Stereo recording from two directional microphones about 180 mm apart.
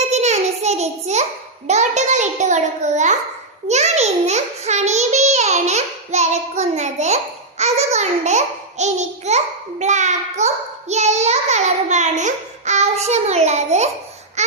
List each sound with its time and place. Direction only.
0.1 s a sound: 40° right (ahead or behind)
3.7 s a child's voice: 40° right (ahead or behind)
14.4 s babbling: 40° right (ahead or behind)